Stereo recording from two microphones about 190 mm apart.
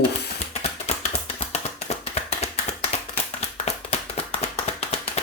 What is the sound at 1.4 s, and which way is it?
Tap, 35° left (ahead or behind).